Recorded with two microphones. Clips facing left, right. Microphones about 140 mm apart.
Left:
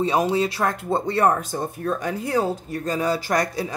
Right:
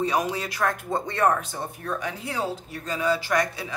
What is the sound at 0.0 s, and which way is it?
Speech, 30° left (ahead or behind).